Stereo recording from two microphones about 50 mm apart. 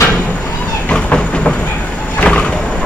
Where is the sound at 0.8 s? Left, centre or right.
Left.